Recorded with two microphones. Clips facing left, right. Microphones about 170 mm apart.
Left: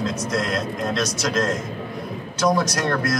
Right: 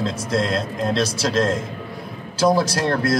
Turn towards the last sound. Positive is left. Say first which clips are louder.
# right 3 dB
turn(degrees=-30)  # may be behind; listen again after turning